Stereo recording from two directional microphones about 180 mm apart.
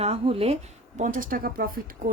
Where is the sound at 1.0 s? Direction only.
50° right (ahead or behind).